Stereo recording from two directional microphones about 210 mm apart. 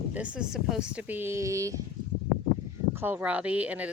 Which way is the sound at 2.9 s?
10° right (ahead or behind).